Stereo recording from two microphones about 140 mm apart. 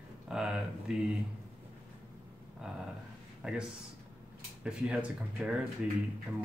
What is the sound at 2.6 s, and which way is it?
Speech, 10° right (ahead or behind).